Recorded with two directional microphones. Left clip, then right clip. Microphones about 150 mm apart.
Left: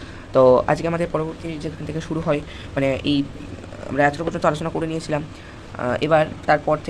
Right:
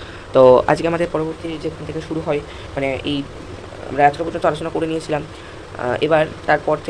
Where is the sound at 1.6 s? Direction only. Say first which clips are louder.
Right 4 dB; 45° left (ahead or behind).